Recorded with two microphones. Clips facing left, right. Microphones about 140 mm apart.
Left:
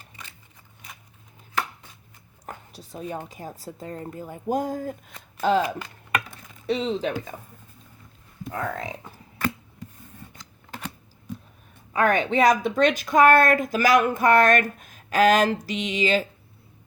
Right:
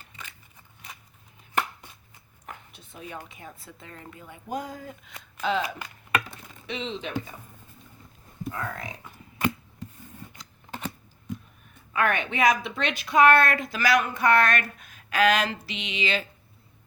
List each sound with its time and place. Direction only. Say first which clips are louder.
2.5 s a sound: left 5 dB; 35° left (ahead or behind)
3.2 s speech: left 7 dB; 35° left (ahead or behind)
8.5 s speech: left 8 dB; 30° left (ahead or behind)
11.9 s speech: left 5 dB; 35° left (ahead or behind)